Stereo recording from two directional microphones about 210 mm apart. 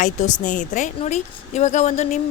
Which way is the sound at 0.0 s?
35° left (ahead or behind).